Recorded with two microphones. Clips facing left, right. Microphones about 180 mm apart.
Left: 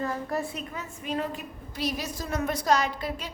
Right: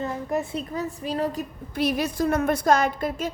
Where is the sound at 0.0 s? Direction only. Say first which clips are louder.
Right 3 dB; 20° right (ahead or behind).